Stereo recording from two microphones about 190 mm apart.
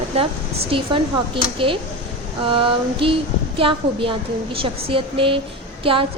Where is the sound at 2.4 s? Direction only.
25° right (ahead or behind).